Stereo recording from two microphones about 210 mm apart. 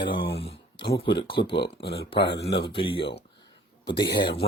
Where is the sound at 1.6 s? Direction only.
50° left (ahead or behind).